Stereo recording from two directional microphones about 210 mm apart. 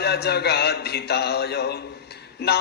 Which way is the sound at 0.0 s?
50° left (ahead or behind).